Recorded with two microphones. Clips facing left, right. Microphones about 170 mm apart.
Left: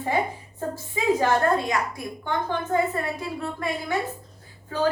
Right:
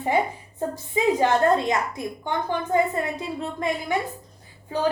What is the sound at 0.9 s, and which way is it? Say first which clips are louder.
A woman's voice: right 2 dB; 20° right (ahead or behind).